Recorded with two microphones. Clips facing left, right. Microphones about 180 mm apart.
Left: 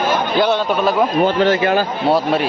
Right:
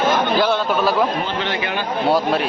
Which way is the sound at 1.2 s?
45° left (ahead or behind).